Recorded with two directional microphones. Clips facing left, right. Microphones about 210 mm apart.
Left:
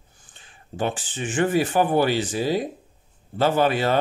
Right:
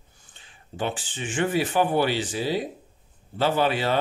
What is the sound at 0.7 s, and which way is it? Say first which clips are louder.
Speech: left 3 dB; 45° left (ahead or behind).